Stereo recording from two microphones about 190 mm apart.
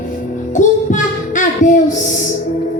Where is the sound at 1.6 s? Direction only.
40° left (ahead or behind).